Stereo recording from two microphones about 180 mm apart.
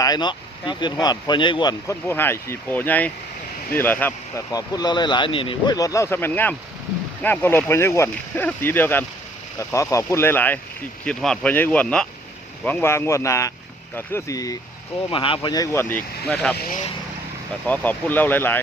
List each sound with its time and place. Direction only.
0.0 s speech: 25° left (ahead or behind); by 16.6 s 5° left (ahead or behind)
16.6 s speech: 55° left (ahead or behind)
17.7 s speech: 10° left (ahead or behind)